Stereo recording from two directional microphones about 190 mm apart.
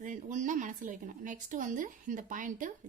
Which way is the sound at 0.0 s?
45° right (ahead or behind).